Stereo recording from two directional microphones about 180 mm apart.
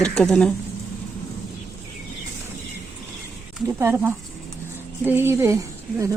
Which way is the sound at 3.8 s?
15° right (ahead or behind).